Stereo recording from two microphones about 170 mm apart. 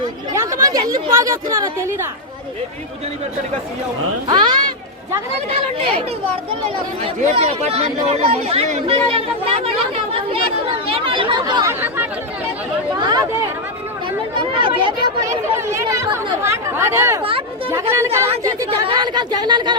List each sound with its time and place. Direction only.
0.3 s speech: 20° right (ahead or behind)
4.3 s speech: 25° right (ahead or behind)
7.0 s speech: 40° right (ahead or behind); by 11.7 s 25° right (ahead or behind)
11.7 s speech: 10° right (ahead or behind)
13.0 s speech: 25° right (ahead or behind)
14.3 s speech: 30° right (ahead or behind)